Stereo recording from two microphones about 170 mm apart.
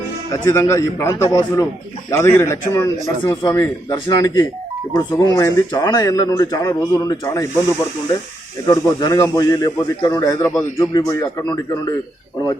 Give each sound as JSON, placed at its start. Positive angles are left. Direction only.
{"t": 0.3, "sound": "a man's voice", "side_deg": 15}
{"t": 8.6, "sound": "speech", "side_deg": 20}